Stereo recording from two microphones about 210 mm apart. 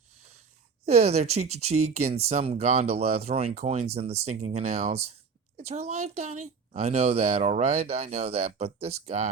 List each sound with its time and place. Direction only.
0.9 s speech: 30° right (ahead or behind)